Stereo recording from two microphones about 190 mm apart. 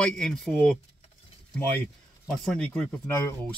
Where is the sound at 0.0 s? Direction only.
5° left (ahead or behind).